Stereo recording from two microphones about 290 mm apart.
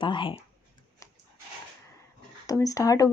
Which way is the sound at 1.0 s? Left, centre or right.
Centre.